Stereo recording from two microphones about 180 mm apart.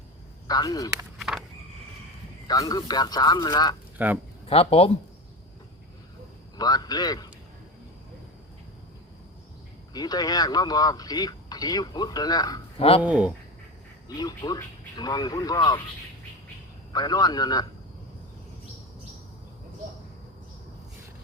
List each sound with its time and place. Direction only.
0.4 s speech: 20° left (ahead or behind)
1.2 s a sound: 5° right (ahead or behind)
2.5 s speech: 20° left (ahead or behind)
3.9 s speech: 10° right (ahead or behind)
4.4 s speech: 35° left (ahead or behind)
6.6 s speech: 20° left (ahead or behind)
9.9 s speech: 20° left (ahead or behind)
13.0 s speech: 5° right (ahead or behind)
14.2 s speech: 20° left (ahead or behind)
16.9 s speech: 25° left (ahead or behind)